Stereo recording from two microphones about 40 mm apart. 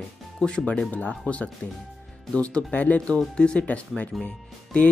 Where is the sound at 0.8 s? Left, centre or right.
Left.